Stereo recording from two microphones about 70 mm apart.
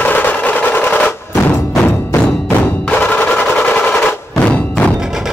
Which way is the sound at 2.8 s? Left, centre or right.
Left.